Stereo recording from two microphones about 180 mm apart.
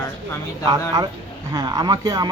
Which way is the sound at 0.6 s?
20° right (ahead or behind).